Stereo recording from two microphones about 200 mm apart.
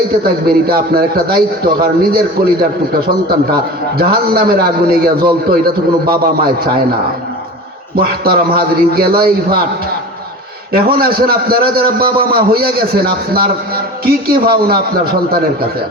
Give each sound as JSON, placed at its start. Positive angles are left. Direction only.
{"t": 0.2, "sound": "a man's voice", "side_deg": -50}
{"t": 7.9, "sound": "a man's voice", "side_deg": -50}
{"t": 10.7, "sound": "a man's voice", "side_deg": -50}